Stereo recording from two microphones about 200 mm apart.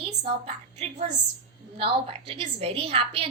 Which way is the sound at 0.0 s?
30° right (ahead or behind).